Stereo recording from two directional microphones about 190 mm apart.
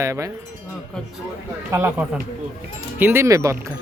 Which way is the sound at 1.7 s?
10° right (ahead or behind).